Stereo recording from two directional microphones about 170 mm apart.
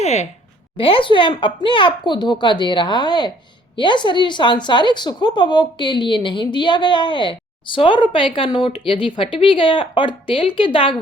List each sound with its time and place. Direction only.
0.0 s a woman's voice: 40° left (ahead or behind)